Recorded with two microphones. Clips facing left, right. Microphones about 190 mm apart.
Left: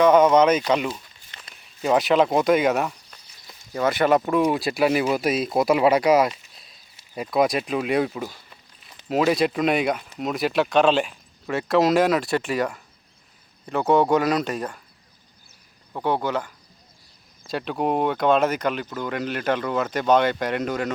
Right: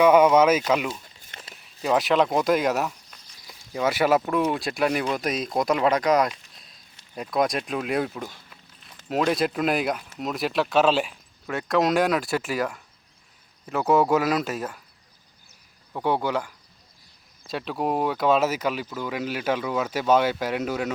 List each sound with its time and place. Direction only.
0.0 s speech: 10° right (ahead or behind)
16.0 s speech: 10° right (ahead or behind)
17.4 s speech: centre (ahead or behind)